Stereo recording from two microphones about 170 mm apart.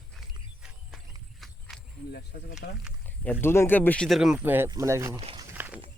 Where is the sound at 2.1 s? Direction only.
60° left (ahead or behind).